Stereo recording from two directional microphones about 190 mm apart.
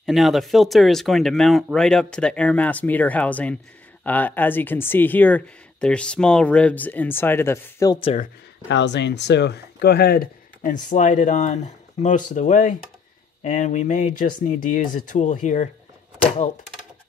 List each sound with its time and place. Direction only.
0.0 s speech: centre (ahead or behind); by 8.0 s 15° left (ahead or behind)
8.6 s speech: 65° left (ahead or behind); by 15.7 s 40° left (ahead or behind)